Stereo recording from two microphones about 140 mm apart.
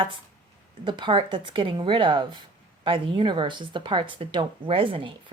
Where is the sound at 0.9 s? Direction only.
35° right (ahead or behind).